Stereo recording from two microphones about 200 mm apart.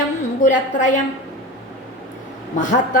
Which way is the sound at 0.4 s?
40° left (ahead or behind).